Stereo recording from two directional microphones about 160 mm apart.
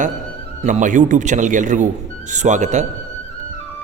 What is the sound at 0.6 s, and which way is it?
A man's voice, 50° right (ahead or behind).